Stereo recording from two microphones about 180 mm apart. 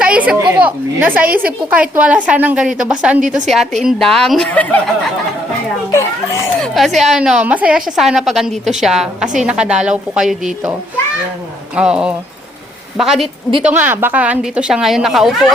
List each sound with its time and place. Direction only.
0.0 s a sound: 5° right (ahead or behind)
0.6 s a woman's voice: 10° right (ahead or behind)
3.2 s a woman's voice: 45° right (ahead or behind)
3.8 s a woman's voice: centre (ahead or behind)
5.9 s a child's voice: 15° left (ahead or behind)
6.6 s a woman's voice: centre (ahead or behind)
11.8 s a woman's voice: 5° right (ahead or behind)